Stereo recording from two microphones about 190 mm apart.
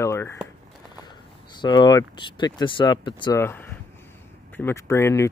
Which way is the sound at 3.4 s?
10° left (ahead or behind).